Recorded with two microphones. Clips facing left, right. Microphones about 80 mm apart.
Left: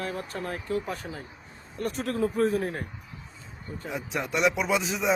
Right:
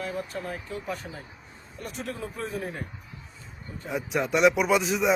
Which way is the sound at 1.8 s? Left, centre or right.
Left.